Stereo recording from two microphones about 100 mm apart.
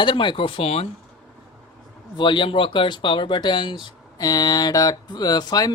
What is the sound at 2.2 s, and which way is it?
Speech, 55° left (ahead or behind).